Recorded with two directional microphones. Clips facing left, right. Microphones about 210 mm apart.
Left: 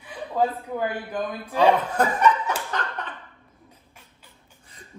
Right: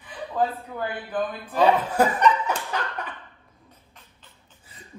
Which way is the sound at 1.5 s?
5° right (ahead or behind).